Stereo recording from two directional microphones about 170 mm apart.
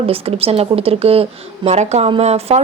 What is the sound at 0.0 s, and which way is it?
Speech, 35° right (ahead or behind).